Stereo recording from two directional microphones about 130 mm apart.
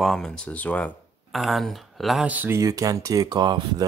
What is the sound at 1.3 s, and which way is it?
Speech, centre (ahead or behind).